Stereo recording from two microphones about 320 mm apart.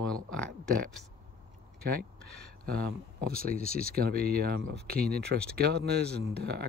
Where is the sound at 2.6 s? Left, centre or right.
Right.